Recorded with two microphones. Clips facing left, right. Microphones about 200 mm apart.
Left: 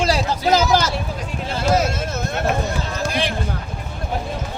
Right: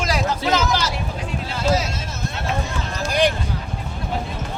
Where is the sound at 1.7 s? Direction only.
55° left (ahead or behind).